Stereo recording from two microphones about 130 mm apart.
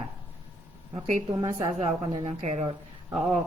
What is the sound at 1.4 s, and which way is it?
Speech, 30° right (ahead or behind).